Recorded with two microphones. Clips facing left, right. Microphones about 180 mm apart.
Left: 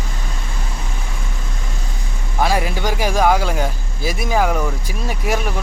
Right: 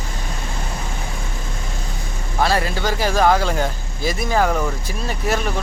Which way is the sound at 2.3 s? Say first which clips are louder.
Left 1 dB; 15° left (ahead or behind).